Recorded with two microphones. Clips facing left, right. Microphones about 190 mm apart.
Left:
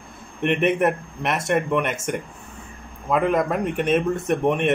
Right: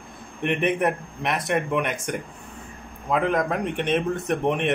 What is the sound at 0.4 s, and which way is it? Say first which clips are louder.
Speech: left 3 dB; centre (ahead or behind).